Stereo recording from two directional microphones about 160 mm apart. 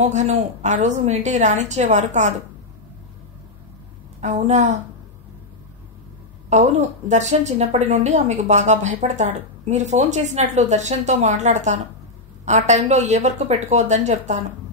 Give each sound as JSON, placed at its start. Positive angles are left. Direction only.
{"t": 0.0, "sound": "a woman's voice", "side_deg": -45}
{"t": 4.2, "sound": "a woman's voice", "side_deg": -45}
{"t": 6.5, "sound": "a woman's voice", "side_deg": -45}